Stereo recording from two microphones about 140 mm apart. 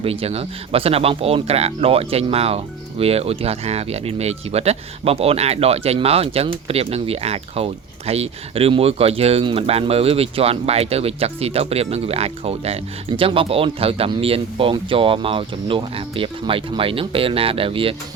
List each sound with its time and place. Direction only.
0.0 s speech: 45° right (ahead or behind)